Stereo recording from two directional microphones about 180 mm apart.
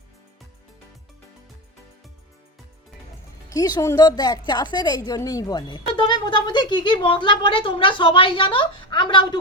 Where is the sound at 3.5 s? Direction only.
20° left (ahead or behind).